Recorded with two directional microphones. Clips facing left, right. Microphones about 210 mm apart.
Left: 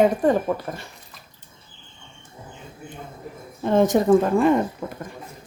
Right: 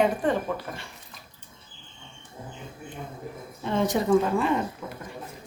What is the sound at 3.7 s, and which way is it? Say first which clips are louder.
Speech: left 6 dB; 45° left (ahead or behind).